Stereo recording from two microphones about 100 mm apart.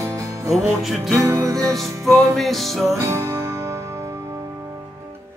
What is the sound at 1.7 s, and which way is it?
Music, centre (ahead or behind).